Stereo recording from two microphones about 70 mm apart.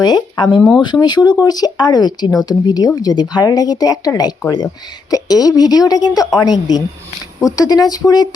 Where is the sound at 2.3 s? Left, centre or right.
Left.